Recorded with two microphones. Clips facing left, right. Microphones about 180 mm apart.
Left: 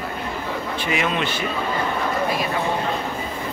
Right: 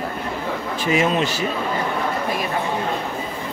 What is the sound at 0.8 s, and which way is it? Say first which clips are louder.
Speech: right 5 dB; 35° right (ahead or behind).